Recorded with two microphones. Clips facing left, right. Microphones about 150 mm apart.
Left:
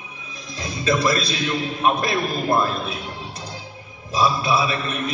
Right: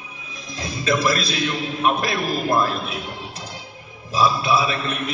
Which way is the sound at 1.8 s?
30° left (ahead or behind).